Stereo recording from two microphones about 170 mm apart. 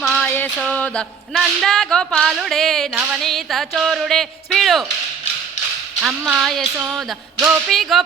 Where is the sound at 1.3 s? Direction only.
Centre (ahead or behind).